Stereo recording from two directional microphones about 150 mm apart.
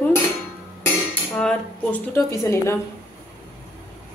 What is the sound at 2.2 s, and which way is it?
Speech, 20° left (ahead or behind).